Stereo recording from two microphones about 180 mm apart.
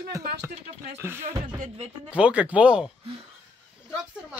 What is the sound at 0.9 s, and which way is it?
Speech, 15° right (ahead or behind).